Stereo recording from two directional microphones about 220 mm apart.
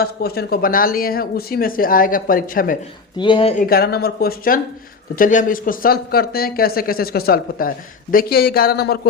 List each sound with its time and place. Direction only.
0.0 s speech: 45° left (ahead or behind)
3.2 s speech: 20° left (ahead or behind)
3.6 s speech: 45° left (ahead or behind)